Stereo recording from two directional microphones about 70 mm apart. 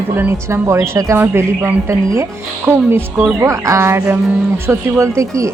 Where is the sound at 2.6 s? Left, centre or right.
Right.